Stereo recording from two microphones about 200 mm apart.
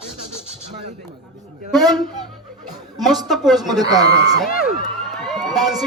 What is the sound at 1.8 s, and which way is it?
Speech, 20° right (ahead or behind).